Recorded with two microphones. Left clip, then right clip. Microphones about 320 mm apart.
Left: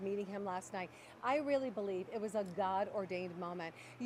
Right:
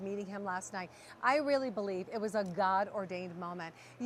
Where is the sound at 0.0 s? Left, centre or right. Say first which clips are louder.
Right 1 dB; right.